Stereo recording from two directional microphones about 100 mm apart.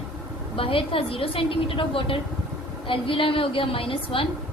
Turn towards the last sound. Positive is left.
turn(degrees=65)  # may be behind; listen again after turning